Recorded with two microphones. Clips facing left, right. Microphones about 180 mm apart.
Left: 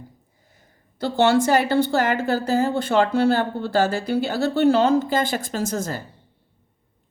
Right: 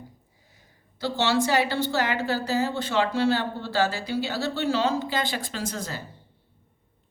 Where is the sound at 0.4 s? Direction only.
50° left (ahead or behind).